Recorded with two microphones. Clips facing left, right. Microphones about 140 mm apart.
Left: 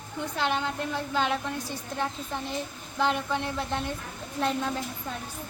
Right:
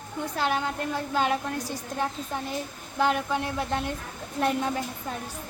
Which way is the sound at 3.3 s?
10° right (ahead or behind).